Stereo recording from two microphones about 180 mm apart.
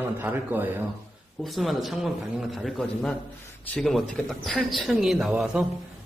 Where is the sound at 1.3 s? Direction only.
Centre (ahead or behind).